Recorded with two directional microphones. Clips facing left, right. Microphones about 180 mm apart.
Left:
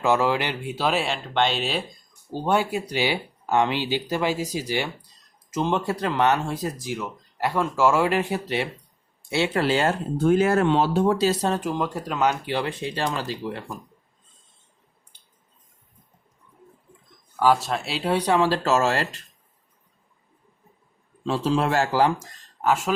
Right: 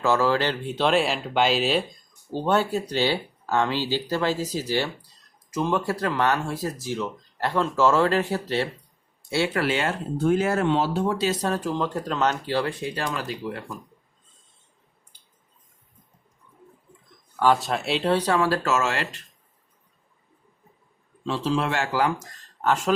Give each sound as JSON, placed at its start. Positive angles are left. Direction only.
{"t": 0.0, "sound": "speech", "side_deg": 15}
{"t": 2.3, "sound": "speech", "side_deg": 10}
{"t": 10.3, "sound": "speech", "side_deg": 60}
{"t": 11.4, "sound": "speech", "side_deg": 20}
{"t": 17.4, "sound": "speech", "side_deg": 5}
{"t": 18.1, "sound": "speech", "side_deg": 15}
{"t": 21.2, "sound": "speech", "side_deg": 40}
{"t": 22.6, "sound": "speech", "side_deg": 5}